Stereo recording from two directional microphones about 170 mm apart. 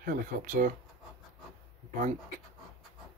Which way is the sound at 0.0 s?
55° right (ahead or behind).